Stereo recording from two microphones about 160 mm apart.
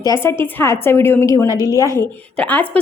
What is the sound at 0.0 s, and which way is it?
A woman's voice, 20° left (ahead or behind).